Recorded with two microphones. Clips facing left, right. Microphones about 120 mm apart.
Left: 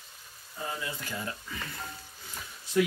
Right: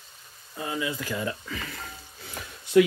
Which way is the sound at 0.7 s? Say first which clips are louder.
Right 7 dB; 90° right.